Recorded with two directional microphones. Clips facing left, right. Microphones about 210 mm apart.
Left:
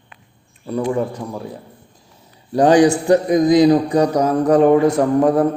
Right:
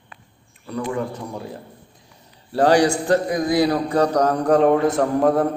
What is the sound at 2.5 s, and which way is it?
A man's voice, 20° left (ahead or behind).